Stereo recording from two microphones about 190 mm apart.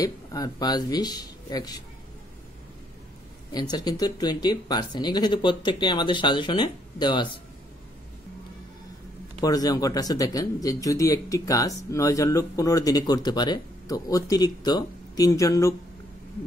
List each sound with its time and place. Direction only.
0.0 s speech: 20° left (ahead or behind)
3.5 s speech: 20° left (ahead or behind)
9.4 s speech: 20° left (ahead or behind)